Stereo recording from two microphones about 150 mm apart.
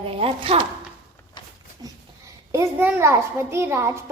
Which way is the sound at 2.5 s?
15° right (ahead or behind).